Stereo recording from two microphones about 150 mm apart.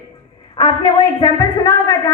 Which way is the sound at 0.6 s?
30° left (ahead or behind).